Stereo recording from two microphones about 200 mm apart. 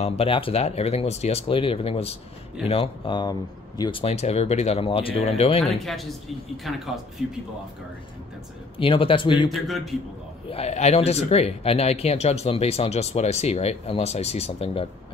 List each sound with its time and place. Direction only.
0.0 s speech: 30° left (ahead or behind)
5.9 s a man's voice: centre (ahead or behind)
8.7 s speech: 25° left (ahead or behind)
9.5 s a man's voice: centre (ahead or behind)
10.5 s speech: 35° left (ahead or behind)